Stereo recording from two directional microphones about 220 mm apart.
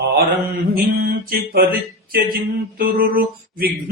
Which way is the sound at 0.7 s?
45° right (ahead or behind).